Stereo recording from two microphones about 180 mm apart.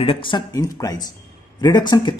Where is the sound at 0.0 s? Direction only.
30° left (ahead or behind).